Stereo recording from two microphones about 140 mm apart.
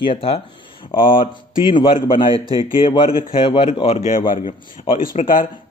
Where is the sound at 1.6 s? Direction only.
35° left (ahead or behind).